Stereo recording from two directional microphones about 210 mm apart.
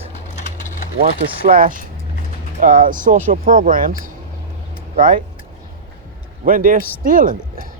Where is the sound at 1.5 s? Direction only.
40° right (ahead or behind).